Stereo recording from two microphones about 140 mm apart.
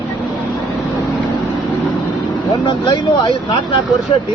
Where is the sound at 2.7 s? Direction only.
35° left (ahead or behind).